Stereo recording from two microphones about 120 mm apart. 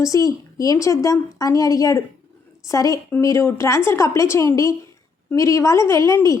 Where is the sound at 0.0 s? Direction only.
25° left (ahead or behind).